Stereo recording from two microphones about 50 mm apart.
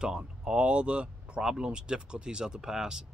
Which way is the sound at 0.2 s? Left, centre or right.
Right.